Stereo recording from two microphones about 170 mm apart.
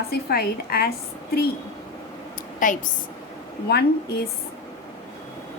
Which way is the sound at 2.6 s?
50° left (ahead or behind).